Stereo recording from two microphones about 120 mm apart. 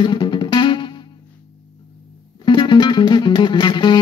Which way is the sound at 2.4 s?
40° left (ahead or behind).